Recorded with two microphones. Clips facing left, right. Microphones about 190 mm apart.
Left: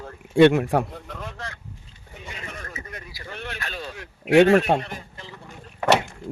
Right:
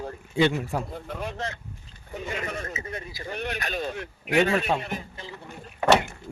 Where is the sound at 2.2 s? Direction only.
40° right (ahead or behind).